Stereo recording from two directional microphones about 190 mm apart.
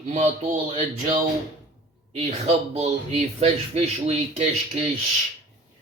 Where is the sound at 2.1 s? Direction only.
35° right (ahead or behind).